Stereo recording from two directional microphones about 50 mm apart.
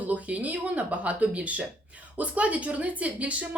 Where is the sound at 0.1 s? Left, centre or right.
Right.